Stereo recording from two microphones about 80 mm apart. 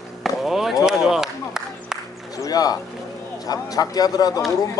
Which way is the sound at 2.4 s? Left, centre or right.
Left.